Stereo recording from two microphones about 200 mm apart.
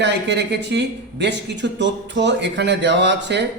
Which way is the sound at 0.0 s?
60° right (ahead or behind).